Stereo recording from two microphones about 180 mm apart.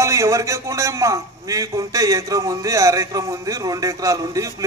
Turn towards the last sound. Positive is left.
turn(degrees=-20)  # may be behind; listen again after turning